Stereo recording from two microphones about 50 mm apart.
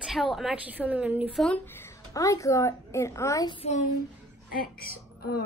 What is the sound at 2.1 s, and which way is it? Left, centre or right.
A woman's voice, left.